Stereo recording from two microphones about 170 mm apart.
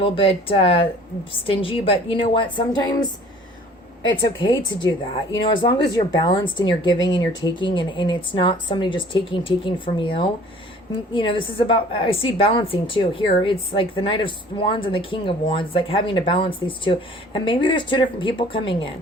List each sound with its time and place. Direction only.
0.0 s a woman's voice: 35° left (ahead or behind)
4.4 s a woman's voice: 30° left (ahead or behind)